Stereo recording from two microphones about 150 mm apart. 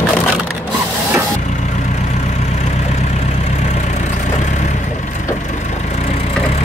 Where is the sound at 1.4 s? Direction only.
55° left (ahead or behind).